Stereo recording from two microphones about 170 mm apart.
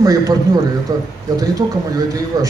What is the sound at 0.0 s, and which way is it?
Speech, 20° right (ahead or behind).